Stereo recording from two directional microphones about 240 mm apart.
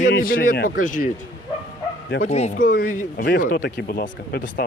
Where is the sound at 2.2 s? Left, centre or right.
Left.